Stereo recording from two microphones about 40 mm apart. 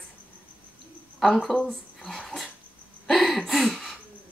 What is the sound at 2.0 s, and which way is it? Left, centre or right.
Dog, centre.